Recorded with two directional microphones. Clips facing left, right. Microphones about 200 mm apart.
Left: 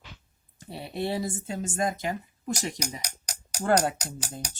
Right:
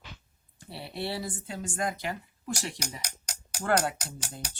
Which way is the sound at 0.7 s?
20° left (ahead or behind).